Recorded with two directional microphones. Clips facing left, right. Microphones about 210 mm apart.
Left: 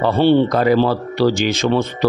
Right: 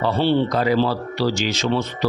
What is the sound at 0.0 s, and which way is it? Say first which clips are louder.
Speech: left 5 dB; 55° left (ahead or behind).